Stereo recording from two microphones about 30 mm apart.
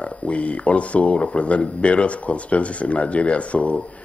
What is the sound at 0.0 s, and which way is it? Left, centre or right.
Speech, left.